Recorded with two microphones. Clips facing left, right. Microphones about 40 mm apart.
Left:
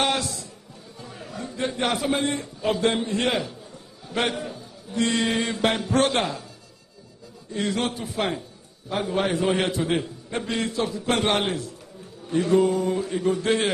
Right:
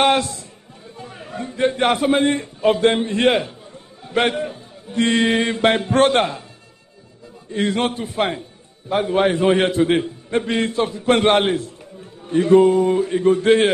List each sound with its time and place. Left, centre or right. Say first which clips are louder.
0.0 s a sound: right 7 dB; right
0.9 s a man's voice: right 6 dB; right
7.5 s a man's voice: right 6 dB; right